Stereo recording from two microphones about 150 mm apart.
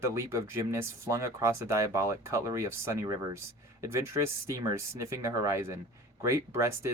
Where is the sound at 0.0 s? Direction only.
20° right (ahead or behind).